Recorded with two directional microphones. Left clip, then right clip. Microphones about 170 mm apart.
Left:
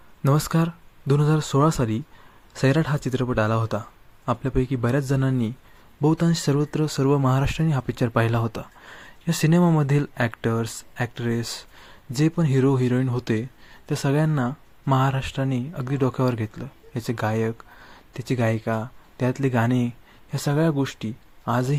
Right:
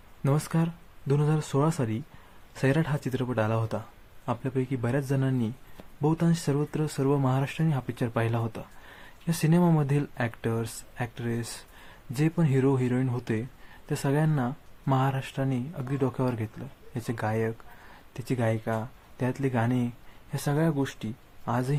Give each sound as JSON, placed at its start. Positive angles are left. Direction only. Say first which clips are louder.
{"t": 0.2, "sound": "speech", "louder": "left 6 dB", "side_deg": 25}